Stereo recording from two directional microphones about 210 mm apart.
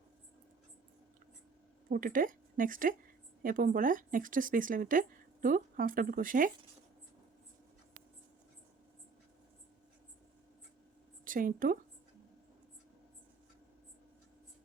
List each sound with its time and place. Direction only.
1.9 s a woman's voice: 40° right (ahead or behind)
11.3 s speech: 40° right (ahead or behind)